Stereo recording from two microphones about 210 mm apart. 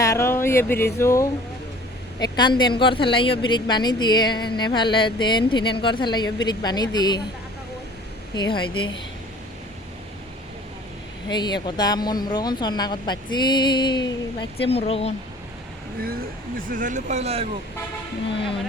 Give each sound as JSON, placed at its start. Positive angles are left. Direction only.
{"t": 0.0, "sound": "a woman's voice", "side_deg": 15}
{"t": 8.4, "sound": "a woman's voice", "side_deg": 20}
{"t": 11.3, "sound": "a woman's voice", "side_deg": 20}
{"t": 16.6, "sound": "speech", "side_deg": -40}